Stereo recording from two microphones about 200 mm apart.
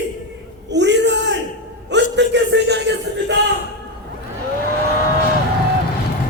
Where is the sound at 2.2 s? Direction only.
60° right (ahead or behind).